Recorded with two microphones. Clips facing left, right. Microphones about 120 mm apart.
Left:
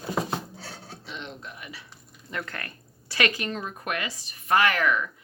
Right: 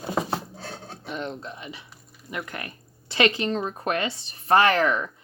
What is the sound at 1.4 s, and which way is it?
Speech, 25° right (ahead or behind).